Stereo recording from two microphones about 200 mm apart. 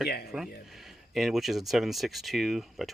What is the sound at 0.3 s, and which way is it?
Speech, centre (ahead or behind).